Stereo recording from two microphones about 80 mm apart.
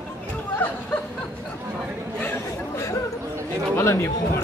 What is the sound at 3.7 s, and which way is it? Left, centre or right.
Chatter, left.